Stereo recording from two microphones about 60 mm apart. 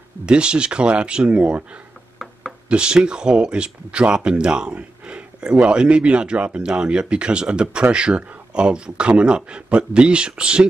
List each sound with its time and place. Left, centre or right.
0.3 s speech: centre
2.7 s speech: centre